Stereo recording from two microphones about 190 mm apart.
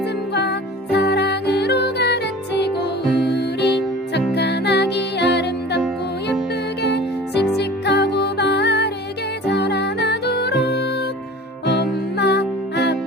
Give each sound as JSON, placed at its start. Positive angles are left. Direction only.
{"t": 0.3, "sound": "music", "side_deg": 60}
{"t": 6.8, "sound": "music", "side_deg": 60}
{"t": 12.1, "sound": "music", "side_deg": 60}